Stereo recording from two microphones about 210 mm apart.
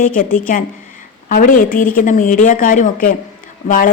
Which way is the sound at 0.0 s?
40° left (ahead or behind).